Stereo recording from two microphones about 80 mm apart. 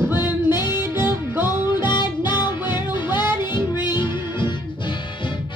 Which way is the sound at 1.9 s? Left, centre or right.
Left.